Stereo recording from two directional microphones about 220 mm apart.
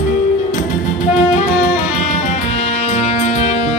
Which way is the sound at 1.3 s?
30° left (ahead or behind).